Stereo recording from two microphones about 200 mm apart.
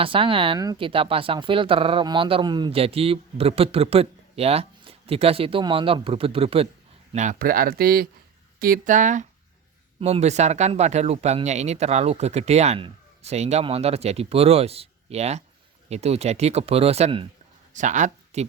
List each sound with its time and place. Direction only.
0.0 s speech: 25° right (ahead or behind)
17.7 s speech: 40° right (ahead or behind)